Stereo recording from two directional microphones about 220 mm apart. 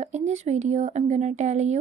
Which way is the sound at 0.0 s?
30° right (ahead or behind).